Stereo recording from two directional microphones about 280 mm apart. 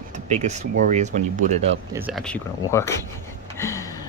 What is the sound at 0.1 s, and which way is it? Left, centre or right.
Speech, right.